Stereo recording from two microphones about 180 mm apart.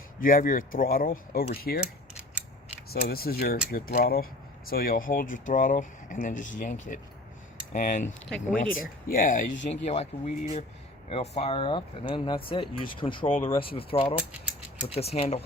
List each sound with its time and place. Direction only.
0.2 s speech: 50° left (ahead or behind)
3.1 s speech: 55° left (ahead or behind)
9.6 s speech: 35° left (ahead or behind)